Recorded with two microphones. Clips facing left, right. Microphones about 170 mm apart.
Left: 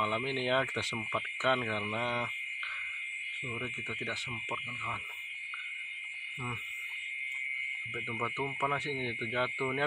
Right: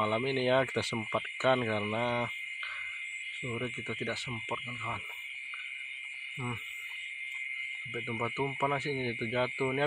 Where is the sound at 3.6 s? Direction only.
5° right (ahead or behind).